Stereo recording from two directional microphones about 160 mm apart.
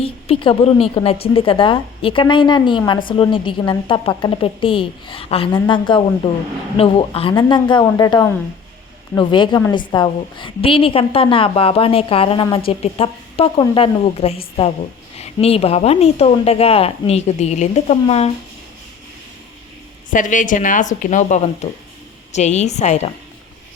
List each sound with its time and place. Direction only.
0.0 s a woman's voice: 35° left (ahead or behind)
20.1 s speech: 55° left (ahead or behind)